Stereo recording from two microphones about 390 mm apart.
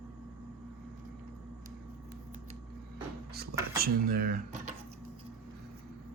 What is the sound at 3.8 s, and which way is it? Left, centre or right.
Speech, right.